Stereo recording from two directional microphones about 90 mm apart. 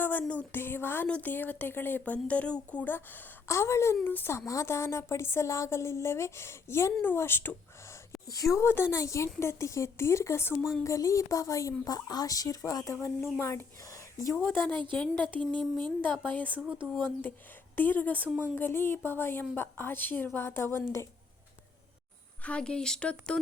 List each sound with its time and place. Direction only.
0.0 s a woman's voice: 20° left (ahead or behind)
8.5 s speech: 30° left (ahead or behind)
14.5 s a woman's voice: 20° left (ahead or behind)
15.4 s speech: 60° right (ahead or behind)
16.2 s speech: 20° left (ahead or behind)
16.6 s speech: 10° right (ahead or behind)
17.0 s a woman's voice: 20° left (ahead or behind)
18.3 s speech: 15° right (ahead or behind)
18.5 s a woman's voice: 25° left (ahead or behind)
22.4 s speech: 10° left (ahead or behind)